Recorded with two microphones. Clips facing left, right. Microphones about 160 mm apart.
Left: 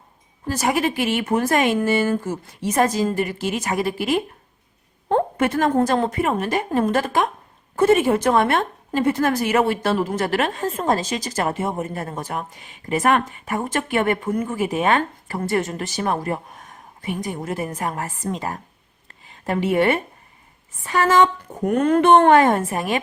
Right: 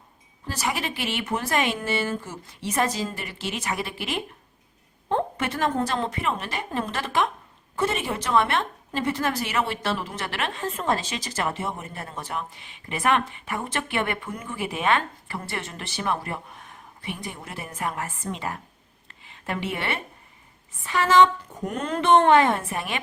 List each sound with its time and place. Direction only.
0.4 s a woman's voice: 45° left (ahead or behind)
19.0 s a sound: 40° left (ahead or behind)
20.8 s a woman's voice: 45° left (ahead or behind)